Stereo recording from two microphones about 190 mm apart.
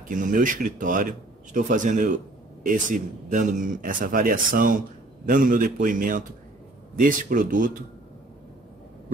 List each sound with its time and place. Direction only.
0.1 s a man's voice: 45° right (ahead or behind)